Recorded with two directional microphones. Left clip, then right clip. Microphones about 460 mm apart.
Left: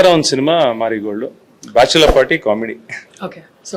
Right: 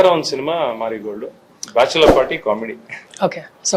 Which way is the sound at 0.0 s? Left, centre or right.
Left.